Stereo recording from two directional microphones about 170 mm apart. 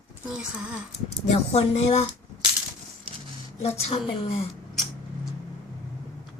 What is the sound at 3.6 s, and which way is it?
Speech, 40° left (ahead or behind).